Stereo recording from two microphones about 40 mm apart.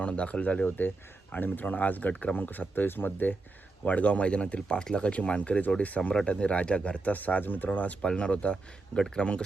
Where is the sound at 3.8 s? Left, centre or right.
Left.